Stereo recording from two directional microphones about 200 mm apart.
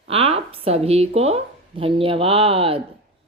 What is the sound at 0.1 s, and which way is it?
A woman's voice, 30° right (ahead or behind).